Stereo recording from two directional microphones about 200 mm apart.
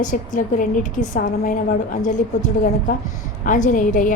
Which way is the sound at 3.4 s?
40° left (ahead or behind).